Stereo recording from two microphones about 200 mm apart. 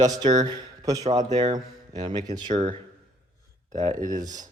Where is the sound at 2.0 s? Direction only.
25° right (ahead or behind).